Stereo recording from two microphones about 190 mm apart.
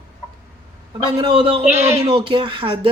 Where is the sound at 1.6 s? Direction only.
10° right (ahead or behind).